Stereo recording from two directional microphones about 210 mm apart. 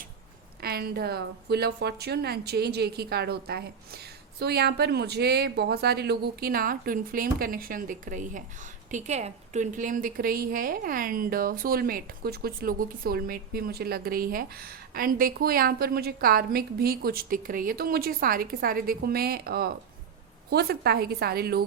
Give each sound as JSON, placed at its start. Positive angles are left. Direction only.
{"t": 0.6, "sound": "a woman's voice", "side_deg": -45}